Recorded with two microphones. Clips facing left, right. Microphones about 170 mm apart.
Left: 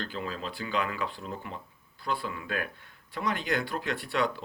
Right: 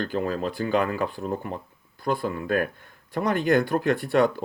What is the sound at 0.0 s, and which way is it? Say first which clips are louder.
Speech: right 9 dB; 50° right (ahead or behind).